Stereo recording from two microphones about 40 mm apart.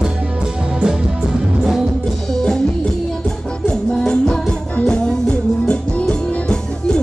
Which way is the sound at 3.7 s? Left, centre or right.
Left.